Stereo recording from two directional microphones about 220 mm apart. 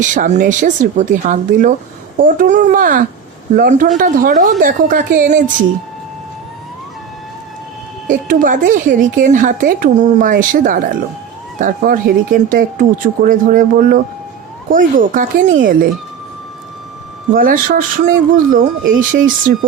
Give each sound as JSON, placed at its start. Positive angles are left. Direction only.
{"t": 0.0, "sound": "speech", "side_deg": -35}
{"t": 8.0, "sound": "speech", "side_deg": -40}
{"t": 17.3, "sound": "speech", "side_deg": -40}